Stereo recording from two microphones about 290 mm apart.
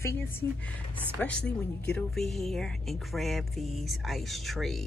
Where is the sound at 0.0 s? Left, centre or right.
Centre.